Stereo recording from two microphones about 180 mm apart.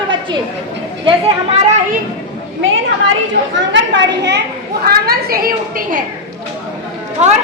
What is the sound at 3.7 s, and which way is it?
Speech, 85° right.